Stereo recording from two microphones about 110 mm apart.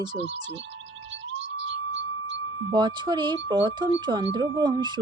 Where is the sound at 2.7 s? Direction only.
45° right (ahead or behind).